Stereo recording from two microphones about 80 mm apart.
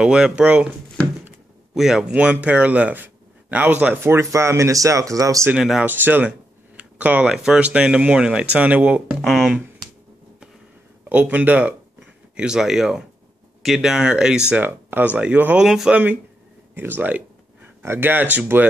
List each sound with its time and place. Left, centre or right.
0.0 s speech: centre
1.8 s speech: centre; by 5.5 s right
5.6 s speech: centre
5.9 s speech: right
6.8 s a sound: centre
7.3 s speech: centre
9.1 s speech: centre
11.1 s speech: centre
14.5 s speech: right
15.6 s speech: centre
16.7 s speech: right